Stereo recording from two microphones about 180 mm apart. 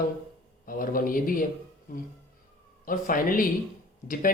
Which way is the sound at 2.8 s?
50° left (ahead or behind).